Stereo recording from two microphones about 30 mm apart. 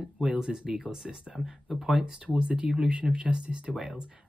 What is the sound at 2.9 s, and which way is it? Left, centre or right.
Speech, right.